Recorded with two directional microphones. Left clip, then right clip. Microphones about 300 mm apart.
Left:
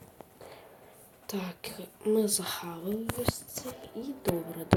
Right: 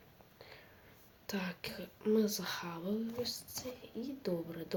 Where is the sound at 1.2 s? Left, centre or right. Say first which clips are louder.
Left 3 dB; centre.